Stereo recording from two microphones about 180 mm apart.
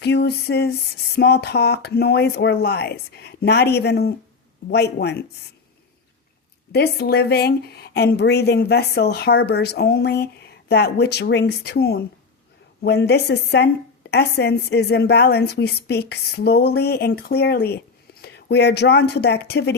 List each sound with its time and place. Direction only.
0.0 s a woman's voice: 65° left (ahead or behind)
6.7 s a woman's voice: 60° left (ahead or behind)